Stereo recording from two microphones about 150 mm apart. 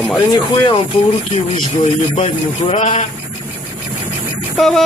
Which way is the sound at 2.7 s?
50° left (ahead or behind).